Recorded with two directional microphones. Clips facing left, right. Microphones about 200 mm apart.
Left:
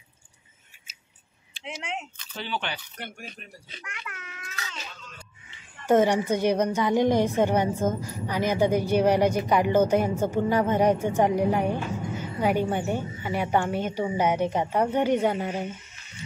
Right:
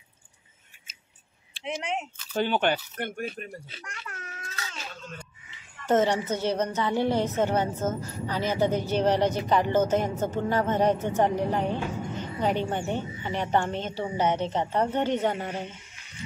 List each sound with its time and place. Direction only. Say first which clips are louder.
2.3 s speech: right 8 dB; 50° right (ahead or behind)
3.8 s baby cry: even; 35° right (ahead or behind)
5.9 s a woman's voice: left 3 dB; 10° left (ahead or behind)